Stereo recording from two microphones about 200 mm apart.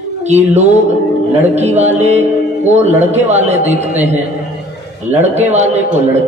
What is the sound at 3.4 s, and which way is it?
A man's voice, 35° right (ahead or behind).